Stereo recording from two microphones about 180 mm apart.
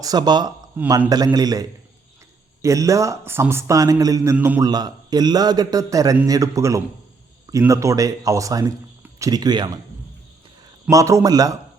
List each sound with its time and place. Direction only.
0.0 s a man's voice: 20° right (ahead or behind)
10.8 s a man's voice: 15° right (ahead or behind)